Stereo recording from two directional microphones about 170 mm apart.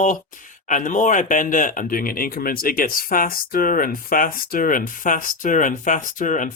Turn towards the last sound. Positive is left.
turn(degrees=50)  # may be behind; listen again after turning